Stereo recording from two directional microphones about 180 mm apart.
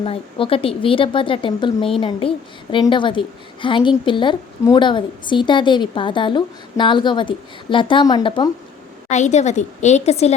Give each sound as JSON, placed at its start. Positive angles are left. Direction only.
{"t": 0.0, "sound": "a woman's voice", "side_deg": 30}
{"t": 9.0, "sound": "a woman's voice", "side_deg": 40}